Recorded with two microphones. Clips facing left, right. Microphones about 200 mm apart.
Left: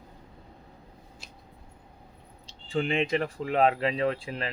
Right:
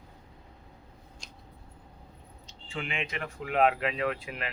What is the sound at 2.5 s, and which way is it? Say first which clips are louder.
Speech: left 9 dB; 35° left (ahead or behind).